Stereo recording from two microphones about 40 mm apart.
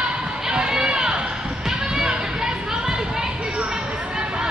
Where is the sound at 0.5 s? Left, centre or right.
Centre.